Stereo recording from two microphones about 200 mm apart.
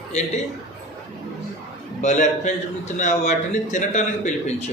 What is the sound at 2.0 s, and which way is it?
A man's voice, 35° left (ahead or behind).